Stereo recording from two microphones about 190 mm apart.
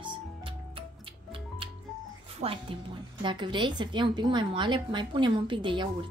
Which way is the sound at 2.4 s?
35° right (ahead or behind).